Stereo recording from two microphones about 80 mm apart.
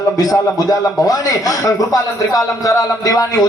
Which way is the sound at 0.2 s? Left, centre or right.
Left.